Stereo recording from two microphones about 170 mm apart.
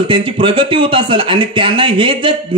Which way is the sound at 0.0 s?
30° right (ahead or behind).